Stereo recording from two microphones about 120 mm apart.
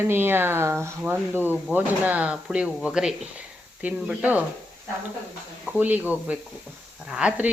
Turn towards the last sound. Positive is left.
turn(degrees=-10)  # may be behind; listen again after turning